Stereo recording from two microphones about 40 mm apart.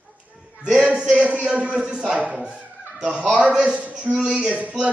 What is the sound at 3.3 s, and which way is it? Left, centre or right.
A man's voice, right.